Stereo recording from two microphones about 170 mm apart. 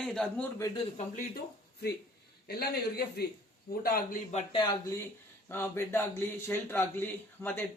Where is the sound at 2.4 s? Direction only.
65° left (ahead or behind).